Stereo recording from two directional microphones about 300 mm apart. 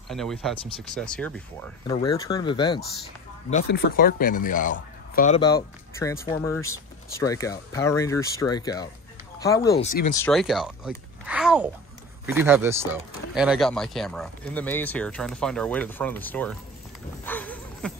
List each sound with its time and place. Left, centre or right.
0.1 s speech: centre
3.6 s a man's voice: left
5.4 s speech: centre
10.2 s speech: centre
17.2 s dog: centre